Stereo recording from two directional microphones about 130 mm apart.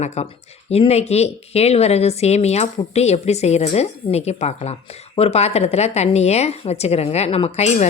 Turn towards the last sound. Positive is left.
turn(degrees=55)  # may be behind; listen again after turning